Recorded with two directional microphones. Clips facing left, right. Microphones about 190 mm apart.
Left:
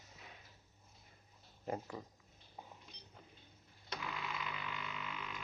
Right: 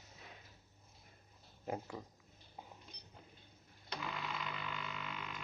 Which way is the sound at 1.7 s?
5° right (ahead or behind).